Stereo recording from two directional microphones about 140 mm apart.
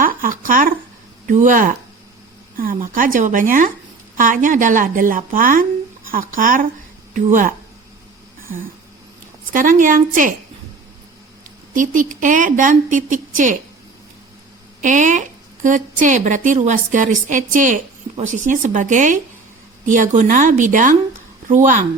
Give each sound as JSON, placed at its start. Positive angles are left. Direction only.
{"t": 0.0, "sound": "a woman's voice", "side_deg": -80}
{"t": 9.5, "sound": "a woman's voice", "side_deg": -75}
{"t": 11.7, "sound": "a woman's voice", "side_deg": -70}
{"t": 14.8, "sound": "a woman's voice", "side_deg": -65}